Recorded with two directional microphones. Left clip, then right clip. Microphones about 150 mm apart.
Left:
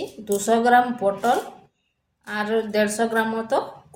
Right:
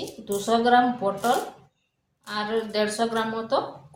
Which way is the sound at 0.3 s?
40° left (ahead or behind).